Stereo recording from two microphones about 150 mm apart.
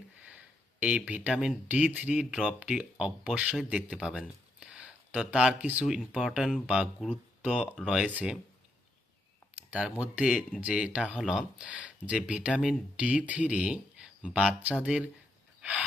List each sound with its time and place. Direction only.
0.2 s speech: 10° right (ahead or behind)
9.6 s speech: 10° right (ahead or behind)